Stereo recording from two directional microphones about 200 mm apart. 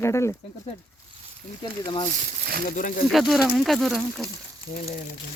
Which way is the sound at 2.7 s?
40° left (ahead or behind).